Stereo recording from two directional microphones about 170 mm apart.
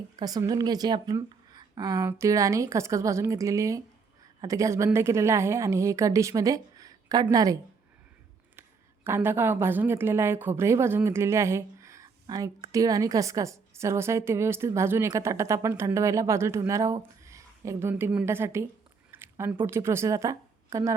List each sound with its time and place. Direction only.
0.2 s a woman's voice: 20° right (ahead or behind)
9.0 s a woman's voice: 15° right (ahead or behind)
19.1 s a sound: 15° right (ahead or behind)
19.6 s a woman's voice: 15° right (ahead or behind)